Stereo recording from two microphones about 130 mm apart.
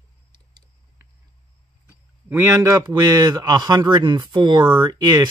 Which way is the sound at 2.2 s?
20° right (ahead or behind).